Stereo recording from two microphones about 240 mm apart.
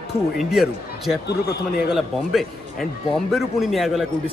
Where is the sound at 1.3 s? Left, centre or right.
Left.